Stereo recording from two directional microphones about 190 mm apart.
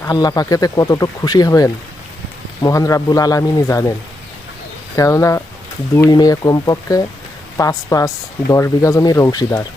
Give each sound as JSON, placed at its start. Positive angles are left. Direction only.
{"t": 0.0, "sound": "speech", "side_deg": 20}
{"t": 4.9, "sound": "speech", "side_deg": 15}